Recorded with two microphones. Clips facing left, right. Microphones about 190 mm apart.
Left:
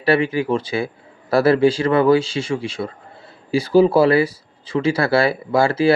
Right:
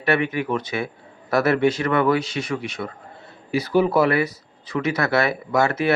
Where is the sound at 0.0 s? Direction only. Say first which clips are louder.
Left 4 dB; 30° left (ahead or behind).